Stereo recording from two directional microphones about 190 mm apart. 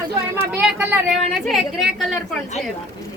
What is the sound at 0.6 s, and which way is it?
A child's voice, centre (ahead or behind).